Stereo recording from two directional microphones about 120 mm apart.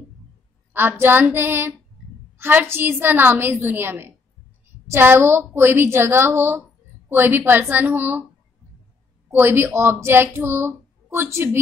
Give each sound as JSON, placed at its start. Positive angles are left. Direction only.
{"t": 0.7, "sound": "a woman's voice", "side_deg": -15}
{"t": 9.3, "sound": "speech", "side_deg": -20}